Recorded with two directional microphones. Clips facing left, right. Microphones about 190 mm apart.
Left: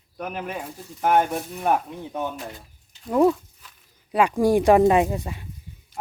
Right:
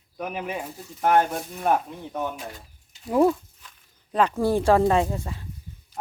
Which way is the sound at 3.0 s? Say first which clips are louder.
Left 1 dB; centre (ahead or behind).